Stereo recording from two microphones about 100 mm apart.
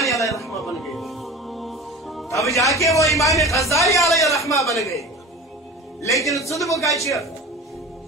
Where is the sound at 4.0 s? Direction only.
Centre (ahead or behind).